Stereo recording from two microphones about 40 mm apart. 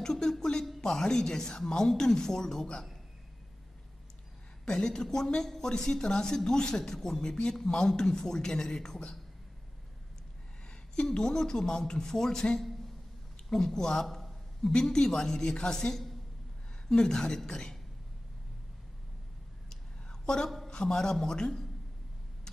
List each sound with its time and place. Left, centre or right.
0.0 s speech: centre
4.6 s speech: centre
10.7 s speech: left
13.5 s a sound: centre
14.7 s speech: centre
16.9 s speech: centre
19.7 s a sound: centre
20.4 s speech: centre